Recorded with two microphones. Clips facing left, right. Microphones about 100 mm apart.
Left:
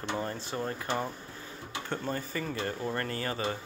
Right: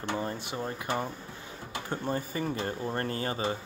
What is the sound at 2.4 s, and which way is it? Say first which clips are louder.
Speech: right 1 dB; 30° right (ahead or behind).